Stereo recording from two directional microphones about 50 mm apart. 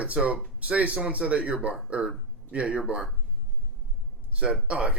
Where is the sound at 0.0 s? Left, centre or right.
Right.